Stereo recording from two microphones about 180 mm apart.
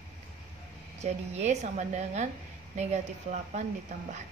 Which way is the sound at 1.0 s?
40° right (ahead or behind).